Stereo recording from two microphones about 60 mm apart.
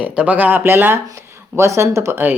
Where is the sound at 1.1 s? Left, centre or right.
Right.